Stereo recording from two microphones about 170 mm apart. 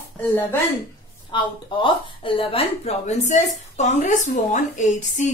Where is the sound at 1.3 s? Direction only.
30° left (ahead or behind).